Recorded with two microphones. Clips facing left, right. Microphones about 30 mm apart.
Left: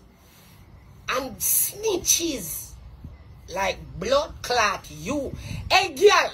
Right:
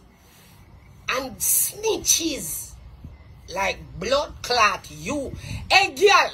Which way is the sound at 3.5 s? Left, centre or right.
Right.